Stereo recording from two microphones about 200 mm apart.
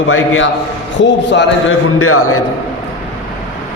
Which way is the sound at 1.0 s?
60° left (ahead or behind).